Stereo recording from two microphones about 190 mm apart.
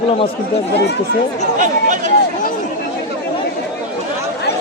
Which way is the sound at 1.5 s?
45° right (ahead or behind).